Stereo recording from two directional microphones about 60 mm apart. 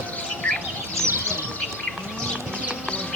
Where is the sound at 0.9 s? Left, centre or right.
Right.